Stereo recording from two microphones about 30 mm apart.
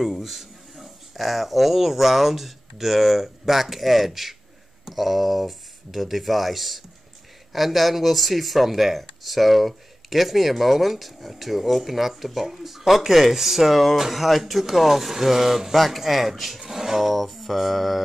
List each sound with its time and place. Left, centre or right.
0.0 s speech: centre
17.1 s mantra: centre